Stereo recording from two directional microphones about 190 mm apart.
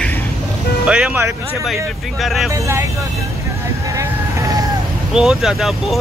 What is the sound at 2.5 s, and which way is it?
Speech, 15° right (ahead or behind).